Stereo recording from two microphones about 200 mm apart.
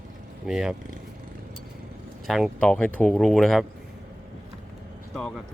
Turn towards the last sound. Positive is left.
turn(degrees=0)  # may be behind; listen again after turning